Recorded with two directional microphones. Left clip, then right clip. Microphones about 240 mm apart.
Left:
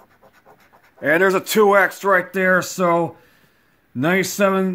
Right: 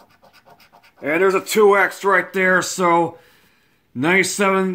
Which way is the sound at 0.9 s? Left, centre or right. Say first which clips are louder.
Left 1 dB; left.